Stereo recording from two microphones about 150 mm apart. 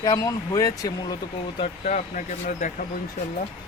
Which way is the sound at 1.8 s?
60° left (ahead or behind).